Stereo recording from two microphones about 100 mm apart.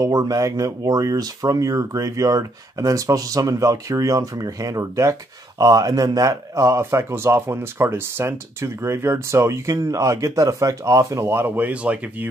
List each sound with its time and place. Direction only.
0.0 s speech: 35° right (ahead or behind); by 12.3 s 15° right (ahead or behind)